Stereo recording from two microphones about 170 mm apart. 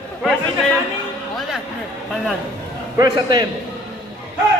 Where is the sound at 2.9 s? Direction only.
20° right (ahead or behind).